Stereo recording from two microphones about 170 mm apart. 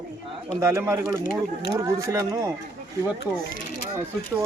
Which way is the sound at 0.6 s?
15° right (ahead or behind).